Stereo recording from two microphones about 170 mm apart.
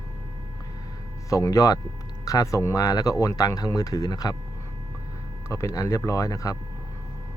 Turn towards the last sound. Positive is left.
turn(degrees=20)  # may be behind; listen again after turning